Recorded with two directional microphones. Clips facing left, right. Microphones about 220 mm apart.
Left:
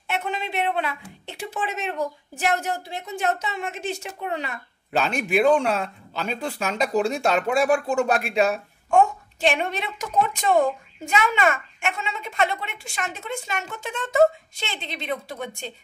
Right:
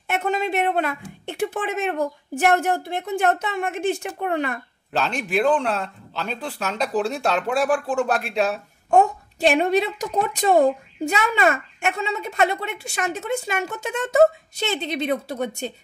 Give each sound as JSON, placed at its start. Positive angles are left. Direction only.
{"t": 0.1, "sound": "speech", "side_deg": -45}
{"t": 4.9, "sound": "speech", "side_deg": 5}
{"t": 8.9, "sound": "a woman's voice", "side_deg": -40}